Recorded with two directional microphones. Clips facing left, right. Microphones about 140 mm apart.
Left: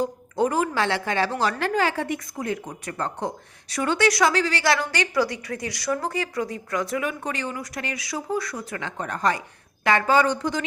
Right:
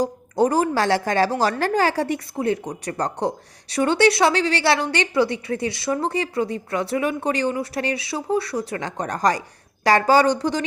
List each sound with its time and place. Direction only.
0.0 s a woman's voice: 35° right (ahead or behind)